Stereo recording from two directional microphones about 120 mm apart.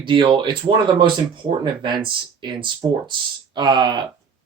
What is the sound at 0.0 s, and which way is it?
Speech, 45° right (ahead or behind).